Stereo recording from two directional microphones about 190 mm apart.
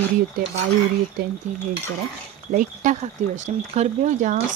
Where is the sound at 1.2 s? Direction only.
50° right (ahead or behind).